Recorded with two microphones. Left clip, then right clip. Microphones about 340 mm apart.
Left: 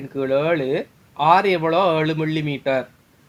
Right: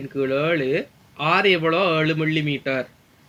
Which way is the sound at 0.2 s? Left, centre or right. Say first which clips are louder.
Left 2 dB; centre.